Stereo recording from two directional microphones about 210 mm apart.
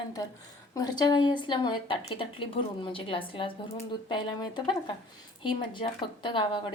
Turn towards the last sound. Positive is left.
turn(degrees=25)  # may be behind; listen again after turning